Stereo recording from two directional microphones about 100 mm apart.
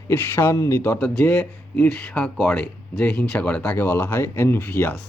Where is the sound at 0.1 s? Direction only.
25° left (ahead or behind).